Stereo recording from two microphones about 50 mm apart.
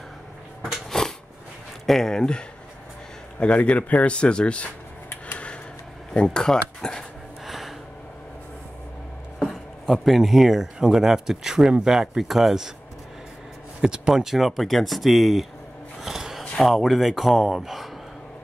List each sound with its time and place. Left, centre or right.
0.8 s a sound: centre
1.9 s speech: centre
6.1 s speech: centre
7.4 s gasp: centre
9.4 s speech: centre
13.7 s speech: centre
16.0 s a sound: centre
16.6 s speech: centre